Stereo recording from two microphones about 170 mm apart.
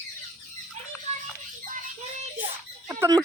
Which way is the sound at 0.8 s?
45° right (ahead or behind).